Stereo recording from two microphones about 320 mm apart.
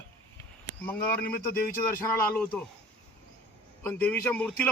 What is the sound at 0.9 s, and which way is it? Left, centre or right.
Speech, centre.